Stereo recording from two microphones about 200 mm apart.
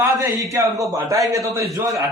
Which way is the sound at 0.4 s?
15° right (ahead or behind).